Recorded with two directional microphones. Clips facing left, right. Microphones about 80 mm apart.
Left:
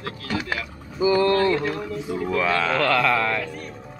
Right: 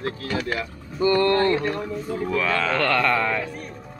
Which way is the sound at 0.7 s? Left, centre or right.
Centre.